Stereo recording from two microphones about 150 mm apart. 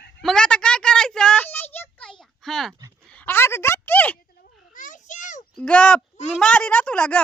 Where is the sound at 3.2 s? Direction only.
15° left (ahead or behind).